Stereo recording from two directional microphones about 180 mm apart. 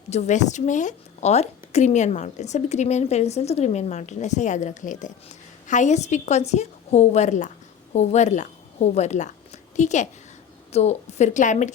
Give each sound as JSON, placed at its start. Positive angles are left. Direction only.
{"t": 0.1, "sound": "a woman's voice", "side_deg": 40}